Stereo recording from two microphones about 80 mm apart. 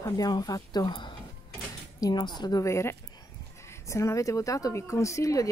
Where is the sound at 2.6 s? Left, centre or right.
Left.